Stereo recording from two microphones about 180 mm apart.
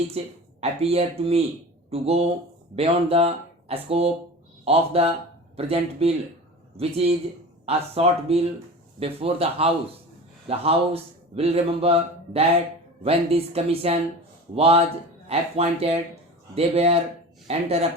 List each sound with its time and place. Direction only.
0.6 s a man's voice: 35° right (ahead or behind)